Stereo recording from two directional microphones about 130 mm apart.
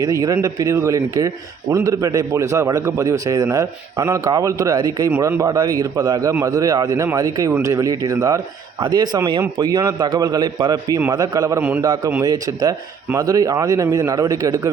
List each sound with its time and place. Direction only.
0.0 s a man's voice: 25° right (ahead or behind)